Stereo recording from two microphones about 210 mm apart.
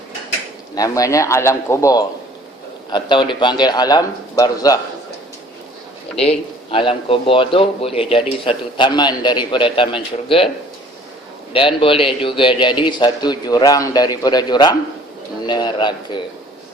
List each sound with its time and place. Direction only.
0.8 s a man's voice: 15° left (ahead or behind)
6.1 s speech: 30° left (ahead or behind)
11.5 s speech: 25° left (ahead or behind)